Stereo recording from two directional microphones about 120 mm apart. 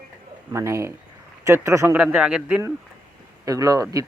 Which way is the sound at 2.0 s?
10° right (ahead or behind).